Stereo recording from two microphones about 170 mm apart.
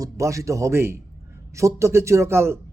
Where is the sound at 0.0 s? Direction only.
20° right (ahead or behind).